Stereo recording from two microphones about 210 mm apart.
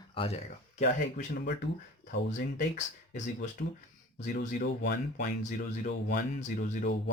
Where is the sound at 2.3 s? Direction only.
35° left (ahead or behind).